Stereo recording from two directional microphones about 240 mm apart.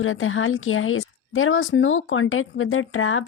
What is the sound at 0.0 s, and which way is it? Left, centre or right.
Speech, left.